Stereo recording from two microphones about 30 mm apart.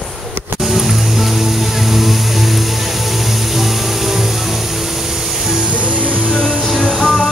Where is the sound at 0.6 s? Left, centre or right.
Centre.